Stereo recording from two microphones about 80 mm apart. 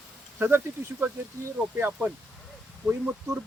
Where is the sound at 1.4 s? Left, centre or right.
Right.